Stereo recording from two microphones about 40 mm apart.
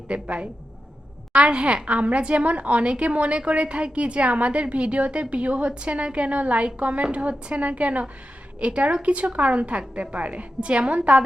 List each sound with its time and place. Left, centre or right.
0.1 s a woman's voice: right